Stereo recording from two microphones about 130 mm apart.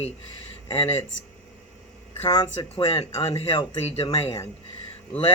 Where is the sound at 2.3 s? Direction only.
40° left (ahead or behind).